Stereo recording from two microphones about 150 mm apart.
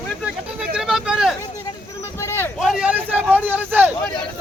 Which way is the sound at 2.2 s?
15° left (ahead or behind).